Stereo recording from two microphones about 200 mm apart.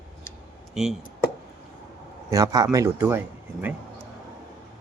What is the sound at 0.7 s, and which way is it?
Speech, centre (ahead or behind).